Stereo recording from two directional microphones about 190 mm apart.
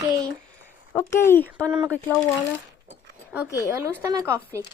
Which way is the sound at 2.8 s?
10° right (ahead or behind).